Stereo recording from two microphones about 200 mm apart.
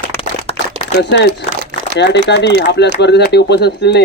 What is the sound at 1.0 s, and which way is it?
Speech, 60° left (ahead or behind).